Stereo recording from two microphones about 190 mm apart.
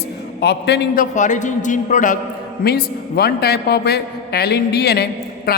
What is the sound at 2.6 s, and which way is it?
A woman's voice, 55° left (ahead or behind).